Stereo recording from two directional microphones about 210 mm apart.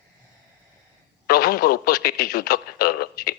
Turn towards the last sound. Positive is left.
turn(degrees=45)  # may be behind; listen again after turning